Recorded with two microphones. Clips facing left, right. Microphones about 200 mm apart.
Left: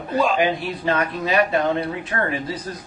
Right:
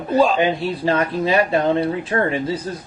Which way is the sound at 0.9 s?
30° right (ahead or behind).